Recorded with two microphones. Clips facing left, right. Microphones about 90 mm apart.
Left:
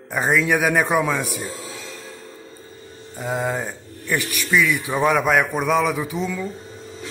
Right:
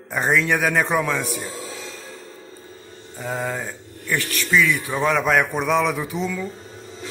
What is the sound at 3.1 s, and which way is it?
Speech, 10° left (ahead or behind).